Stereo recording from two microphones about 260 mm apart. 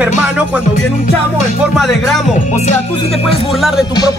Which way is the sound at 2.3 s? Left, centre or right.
Left.